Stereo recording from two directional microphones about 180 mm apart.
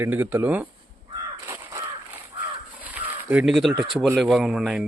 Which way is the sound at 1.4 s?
20° right (ahead or behind).